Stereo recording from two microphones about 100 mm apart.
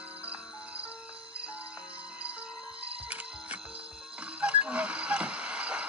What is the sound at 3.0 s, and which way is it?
Music, 10° right (ahead or behind).